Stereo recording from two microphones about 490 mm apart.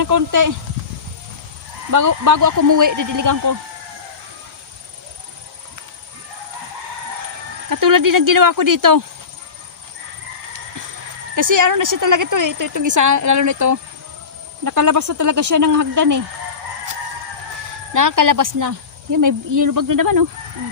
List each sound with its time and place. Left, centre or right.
0.0 s a woman's voice: right
1.9 s a woman's voice: right
7.7 s a woman's voice: right
11.3 s a woman's voice: right
17.9 s a woman's voice: right